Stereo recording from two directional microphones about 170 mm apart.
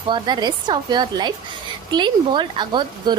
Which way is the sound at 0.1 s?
25° right (ahead or behind).